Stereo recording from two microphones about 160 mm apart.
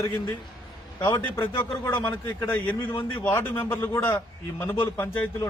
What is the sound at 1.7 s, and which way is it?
A man's voice, 15° left (ahead or behind).